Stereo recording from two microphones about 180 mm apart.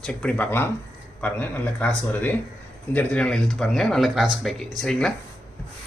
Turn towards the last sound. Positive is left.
turn(degrees=5)  # may be behind; listen again after turning